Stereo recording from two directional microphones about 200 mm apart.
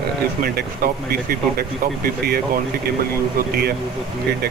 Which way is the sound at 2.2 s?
50° right (ahead or behind).